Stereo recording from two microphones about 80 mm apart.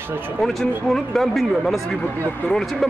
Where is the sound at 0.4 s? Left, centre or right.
Centre.